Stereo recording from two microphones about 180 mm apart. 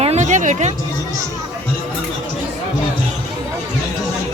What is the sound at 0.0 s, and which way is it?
Music, 40° right (ahead or behind).